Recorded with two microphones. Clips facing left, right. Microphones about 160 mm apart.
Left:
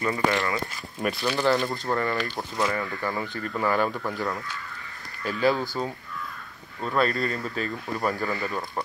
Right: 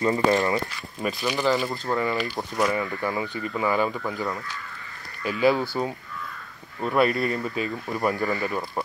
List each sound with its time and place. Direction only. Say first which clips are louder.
0.0 s speech: right 4 dB; 20° right (ahead or behind)
1.2 s speech: even; 10° right (ahead or behind)
1.5 s speech: even; centre (ahead or behind); by 8.6 s 15° right (ahead or behind)